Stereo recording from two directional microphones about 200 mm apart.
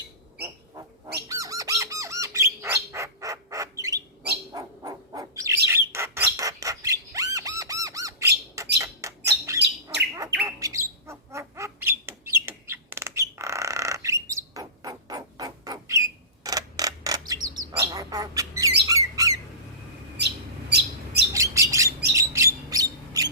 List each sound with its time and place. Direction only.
0.3 s squawk: 15° right (ahead or behind)
4.5 s bird: 20° right (ahead or behind)
20.7 s bird: 55° right (ahead or behind)
21.3 s bird: 15° right (ahead or behind)
22.7 s a sound: 15° right (ahead or behind)